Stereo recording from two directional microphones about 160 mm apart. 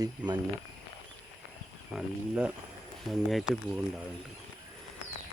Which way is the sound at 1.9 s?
5° right (ahead or behind).